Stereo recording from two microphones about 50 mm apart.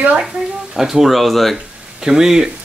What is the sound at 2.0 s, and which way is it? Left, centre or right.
Speech, centre.